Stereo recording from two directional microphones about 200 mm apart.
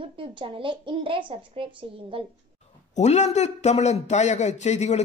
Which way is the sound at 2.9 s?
35° left (ahead or behind).